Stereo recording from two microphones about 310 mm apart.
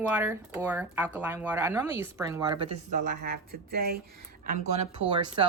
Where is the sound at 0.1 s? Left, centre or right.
Centre.